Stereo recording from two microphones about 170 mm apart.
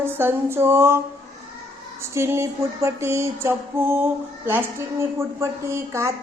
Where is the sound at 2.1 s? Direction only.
15° right (ahead or behind).